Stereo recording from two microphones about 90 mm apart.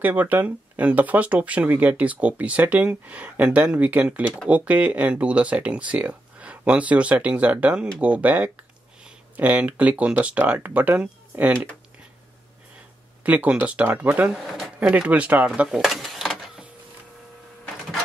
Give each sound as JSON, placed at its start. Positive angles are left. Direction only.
{"t": 0.0, "sound": "speech", "side_deg": -20}
{"t": 13.2, "sound": "speech", "side_deg": -15}
{"t": 14.3, "sound": "speech", "side_deg": -5}
{"t": 14.9, "sound": "speech", "side_deg": -15}